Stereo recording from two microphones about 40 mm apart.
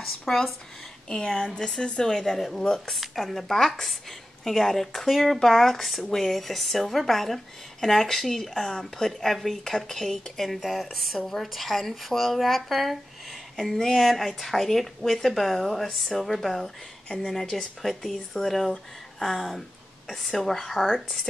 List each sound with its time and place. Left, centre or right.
0.3 s speech: centre
1.0 s speech: left
2.9 s speech: centre
13.6 s speech: centre
17.8 s a woman's voice: centre